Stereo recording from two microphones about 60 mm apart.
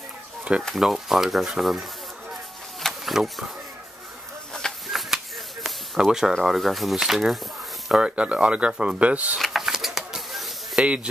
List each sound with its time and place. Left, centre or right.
0.7 s speech: centre
2.8 s a sound: centre
4.9 s a sound: centre
6.4 s speech: centre
7.9 s speech: centre
9.4 s vehicle: centre
10.8 s speech: centre